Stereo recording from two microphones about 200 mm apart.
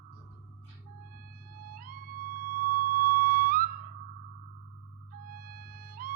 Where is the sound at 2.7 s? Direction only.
45° right (ahead or behind).